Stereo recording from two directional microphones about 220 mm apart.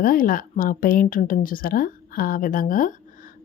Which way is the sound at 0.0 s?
40° left (ahead or behind).